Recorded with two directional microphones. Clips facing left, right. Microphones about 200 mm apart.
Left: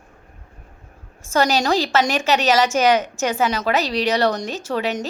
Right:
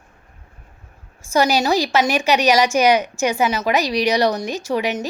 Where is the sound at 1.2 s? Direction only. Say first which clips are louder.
Right 1 dB; 10° right (ahead or behind).